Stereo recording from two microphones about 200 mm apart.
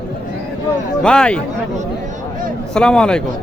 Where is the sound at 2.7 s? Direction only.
5° left (ahead or behind).